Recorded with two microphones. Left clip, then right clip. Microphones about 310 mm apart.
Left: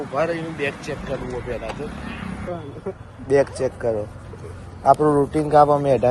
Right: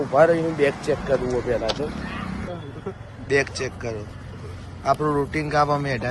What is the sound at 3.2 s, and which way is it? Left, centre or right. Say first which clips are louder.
A man's voice: left 4 dB; centre.